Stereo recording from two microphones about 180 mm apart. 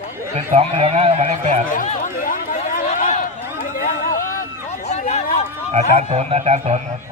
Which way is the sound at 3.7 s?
50° left (ahead or behind).